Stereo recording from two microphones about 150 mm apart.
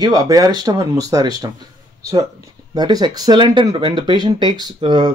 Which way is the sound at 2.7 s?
30° right (ahead or behind).